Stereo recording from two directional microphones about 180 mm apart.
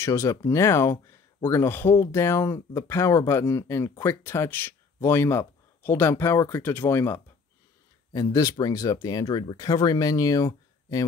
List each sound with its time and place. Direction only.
0.0 s speech: 15° left (ahead or behind)